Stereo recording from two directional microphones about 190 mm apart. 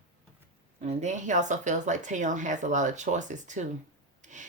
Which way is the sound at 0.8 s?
40° right (ahead or behind).